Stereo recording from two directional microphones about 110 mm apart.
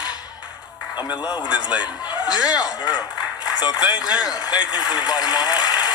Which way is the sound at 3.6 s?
40° left (ahead or behind).